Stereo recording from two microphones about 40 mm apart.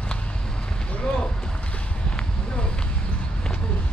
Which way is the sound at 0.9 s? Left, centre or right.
Left.